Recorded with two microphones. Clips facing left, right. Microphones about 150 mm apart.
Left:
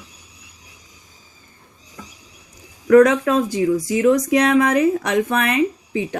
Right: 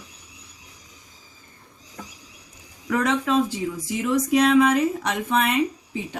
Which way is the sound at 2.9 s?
70° left (ahead or behind).